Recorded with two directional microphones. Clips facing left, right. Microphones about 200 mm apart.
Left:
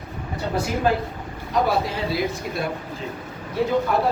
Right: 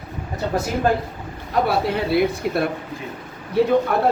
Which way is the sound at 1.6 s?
60° right (ahead or behind).